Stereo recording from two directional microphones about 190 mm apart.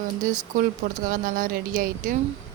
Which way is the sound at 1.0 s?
45° right (ahead or behind).